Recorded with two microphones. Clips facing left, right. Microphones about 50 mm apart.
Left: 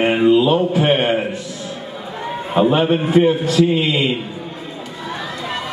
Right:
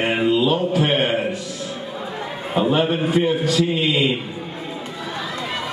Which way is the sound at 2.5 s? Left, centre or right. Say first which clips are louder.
Left 4 dB; centre.